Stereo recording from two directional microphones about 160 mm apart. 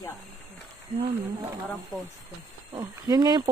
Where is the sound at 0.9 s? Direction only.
35° right (ahead or behind).